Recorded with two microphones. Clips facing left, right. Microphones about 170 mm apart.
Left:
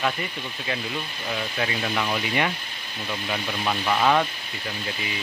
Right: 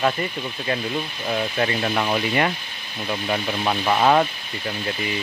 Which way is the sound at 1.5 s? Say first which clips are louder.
Right 2 dB; 40° right (ahead or behind).